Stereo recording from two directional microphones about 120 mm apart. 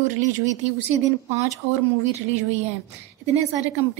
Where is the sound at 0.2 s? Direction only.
75° right (ahead or behind).